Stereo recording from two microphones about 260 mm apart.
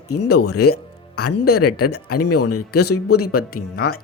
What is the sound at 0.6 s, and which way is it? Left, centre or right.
Music, left.